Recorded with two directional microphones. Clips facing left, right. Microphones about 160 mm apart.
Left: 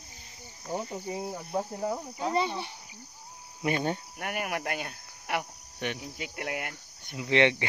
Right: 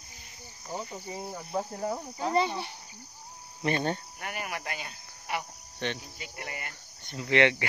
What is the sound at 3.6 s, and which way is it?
Speech, 10° left (ahead or behind).